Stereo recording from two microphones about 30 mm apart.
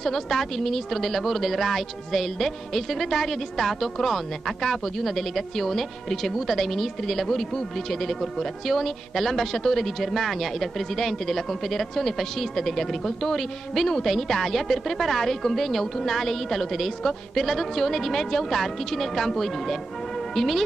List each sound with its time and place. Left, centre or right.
0.0 s speech: centre